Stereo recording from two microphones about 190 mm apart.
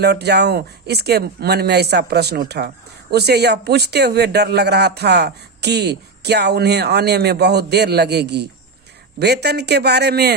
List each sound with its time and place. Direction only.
0.0 s speech: 60° right (ahead or behind)